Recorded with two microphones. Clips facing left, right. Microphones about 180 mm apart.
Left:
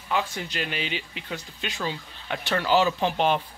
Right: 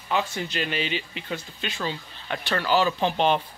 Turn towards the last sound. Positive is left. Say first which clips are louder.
# right 1 dB
turn(degrees=5)  # may be behind; listen again after turning